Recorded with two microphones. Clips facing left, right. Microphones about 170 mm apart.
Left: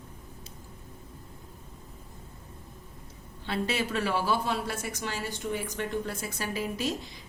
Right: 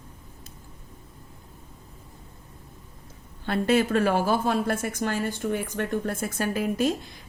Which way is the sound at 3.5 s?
50° right (ahead or behind).